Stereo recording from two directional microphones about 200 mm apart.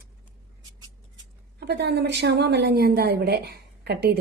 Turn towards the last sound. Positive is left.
turn(degrees=-55)  # may be behind; listen again after turning